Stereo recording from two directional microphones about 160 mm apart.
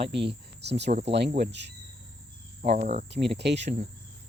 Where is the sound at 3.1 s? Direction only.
90° right.